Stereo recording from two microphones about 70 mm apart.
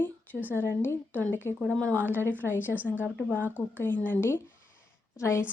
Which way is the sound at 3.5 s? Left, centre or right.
Left.